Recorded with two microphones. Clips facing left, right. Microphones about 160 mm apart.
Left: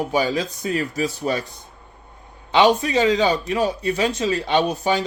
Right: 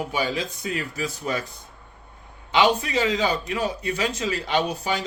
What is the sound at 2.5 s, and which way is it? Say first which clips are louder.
Speech: left 4 dB; 35° left (ahead or behind).